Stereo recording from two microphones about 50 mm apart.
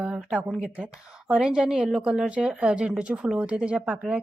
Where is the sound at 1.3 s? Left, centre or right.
Centre.